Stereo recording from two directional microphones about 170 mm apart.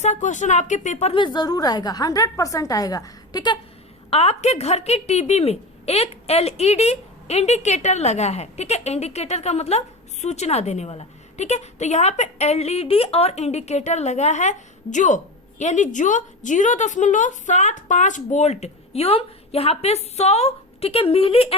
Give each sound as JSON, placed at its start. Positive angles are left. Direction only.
{"t": 0.0, "sound": "speech", "side_deg": 45}
{"t": 4.1, "sound": "a woman's voice", "side_deg": 35}